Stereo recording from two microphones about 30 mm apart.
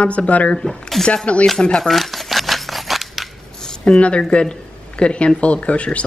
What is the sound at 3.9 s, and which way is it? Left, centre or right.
A woman's voice, left.